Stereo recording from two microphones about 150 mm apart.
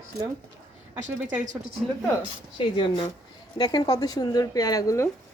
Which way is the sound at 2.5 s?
35° left (ahead or behind).